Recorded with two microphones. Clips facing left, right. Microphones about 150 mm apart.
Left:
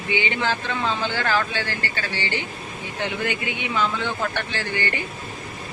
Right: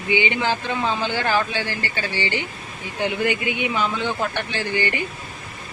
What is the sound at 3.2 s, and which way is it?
Speech, 15° right (ahead or behind).